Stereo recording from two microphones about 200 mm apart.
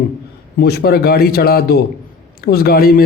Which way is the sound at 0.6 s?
55° left (ahead or behind).